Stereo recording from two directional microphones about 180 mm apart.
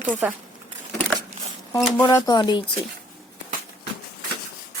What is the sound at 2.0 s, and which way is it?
Speech, 20° left (ahead or behind).